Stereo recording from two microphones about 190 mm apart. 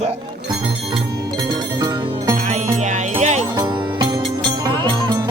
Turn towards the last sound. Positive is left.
turn(degrees=-40)  # may be behind; listen again after turning